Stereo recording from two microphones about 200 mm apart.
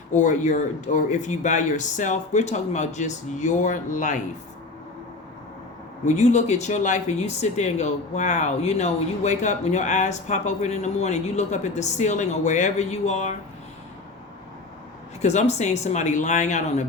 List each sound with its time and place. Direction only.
0.1 s speech: 40° left (ahead or behind)
6.1 s speech: 35° left (ahead or behind)
15.2 s speech: 35° left (ahead or behind)